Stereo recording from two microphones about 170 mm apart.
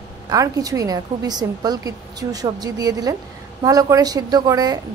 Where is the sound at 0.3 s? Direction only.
20° right (ahead or behind).